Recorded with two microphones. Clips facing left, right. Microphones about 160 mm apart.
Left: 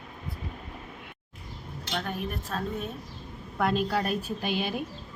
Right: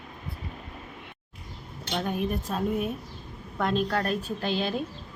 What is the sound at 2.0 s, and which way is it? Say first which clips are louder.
Speech: right 5 dB; 15° right (ahead or behind).